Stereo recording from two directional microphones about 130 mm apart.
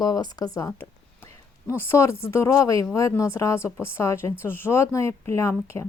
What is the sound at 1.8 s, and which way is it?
Speech, 20° left (ahead or behind).